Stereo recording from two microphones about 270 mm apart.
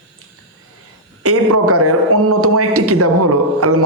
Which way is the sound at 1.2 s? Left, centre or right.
Right.